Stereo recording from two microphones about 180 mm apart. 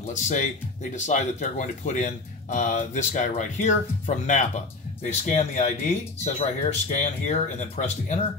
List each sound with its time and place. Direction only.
0.1 s speech: 40° left (ahead or behind)
5.0 s speech: 40° left (ahead or behind)